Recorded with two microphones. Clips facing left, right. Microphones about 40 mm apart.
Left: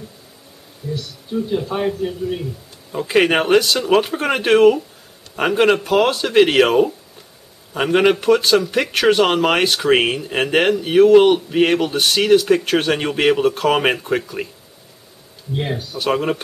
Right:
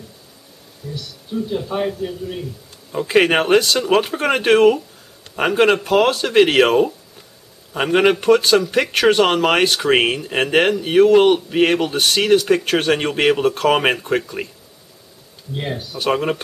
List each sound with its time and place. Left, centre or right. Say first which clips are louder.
0.8 s speech: left 4 dB; centre
1.3 s a man's voice: left 1 dB; centre
15.5 s speech: left 2 dB; centre